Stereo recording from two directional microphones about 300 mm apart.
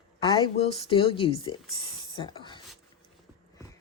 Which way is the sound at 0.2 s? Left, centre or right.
Centre.